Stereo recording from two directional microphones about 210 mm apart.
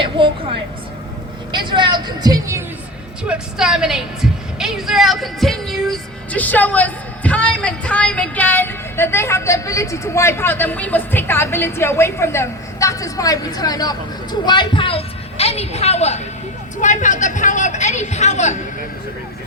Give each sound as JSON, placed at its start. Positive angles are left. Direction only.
{"t": 0.0, "sound": "a sound", "side_deg": -25}
{"t": 1.5, "sound": "a woman's voice", "side_deg": -20}
{"t": 3.2, "sound": "a woman's voice", "side_deg": -5}